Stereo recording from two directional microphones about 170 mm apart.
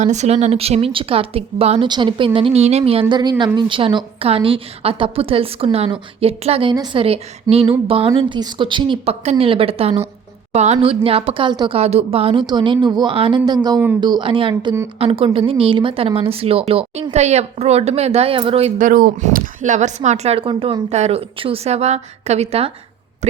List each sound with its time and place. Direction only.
0.0 s a woman's voice: 45° right (ahead or behind)
18.8 s speech: 55° right (ahead or behind); by 22.7 s 35° right (ahead or behind)